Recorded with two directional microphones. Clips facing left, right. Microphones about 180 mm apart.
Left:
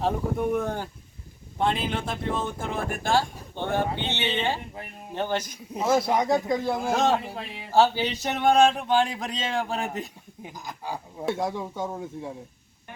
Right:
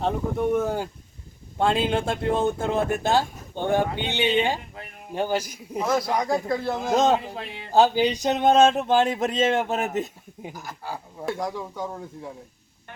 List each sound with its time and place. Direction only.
0.0 s speech: centre (ahead or behind)
1.5 s a man's voice: 25° right (ahead or behind); by 5.8 s 10° right (ahead or behind)
5.8 s stir: 25° left (ahead or behind)
6.5 s speech: 15° left (ahead or behind)
6.9 s speech: 20° right (ahead or behind)
7.2 s speech: centre (ahead or behind)
7.7 s speech: 15° right (ahead or behind)
10.5 s speech: 15° left (ahead or behind)
11.3 s stir: 25° left (ahead or behind)